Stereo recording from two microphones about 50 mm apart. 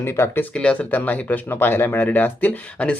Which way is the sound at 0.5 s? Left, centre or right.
Left.